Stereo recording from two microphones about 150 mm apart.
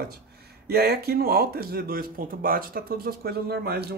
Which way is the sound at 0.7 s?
90° right.